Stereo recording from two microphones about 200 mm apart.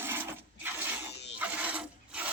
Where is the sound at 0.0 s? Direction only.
10° right (ahead or behind).